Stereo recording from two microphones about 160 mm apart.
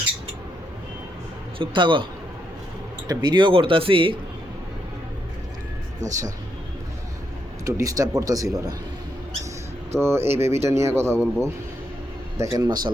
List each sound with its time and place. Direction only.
1.5 s speech: 30° right (ahead or behind)
3.1 s speech: 25° right (ahead or behind)
6.0 s speech: 50° right (ahead or behind)
7.6 s a man's voice: 20° right (ahead or behind)
9.9 s speech: 15° right (ahead or behind)
12.5 s a man's voice: 25° right (ahead or behind)